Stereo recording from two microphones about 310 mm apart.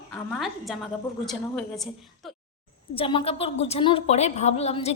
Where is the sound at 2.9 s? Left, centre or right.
Centre.